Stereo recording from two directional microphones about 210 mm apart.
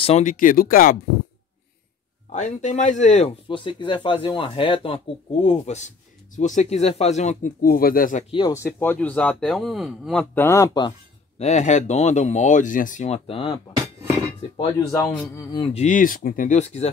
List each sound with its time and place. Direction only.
0.0 s speech: 35° left (ahead or behind)
2.3 s speech: 35° left (ahead or behind)
8.4 s a man's voice: 15° left (ahead or behind)
11.3 s speech: 35° left (ahead or behind)
14.6 s a man's voice: 15° left (ahead or behind); by 16.9 s 30° left (ahead or behind)